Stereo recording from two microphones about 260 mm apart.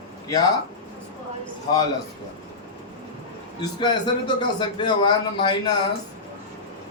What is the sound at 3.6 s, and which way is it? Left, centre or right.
A man's voice, centre.